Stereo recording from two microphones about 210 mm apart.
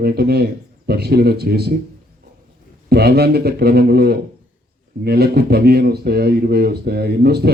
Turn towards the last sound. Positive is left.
turn(degrees=-50)  # may be behind; listen again after turning